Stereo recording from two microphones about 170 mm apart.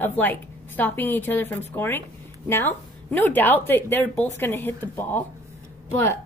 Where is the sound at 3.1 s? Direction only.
10° left (ahead or behind).